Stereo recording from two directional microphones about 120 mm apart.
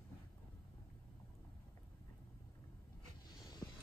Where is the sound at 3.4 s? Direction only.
30° left (ahead or behind).